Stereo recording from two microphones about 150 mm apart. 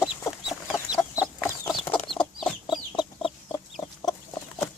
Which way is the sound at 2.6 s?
30° left (ahead or behind).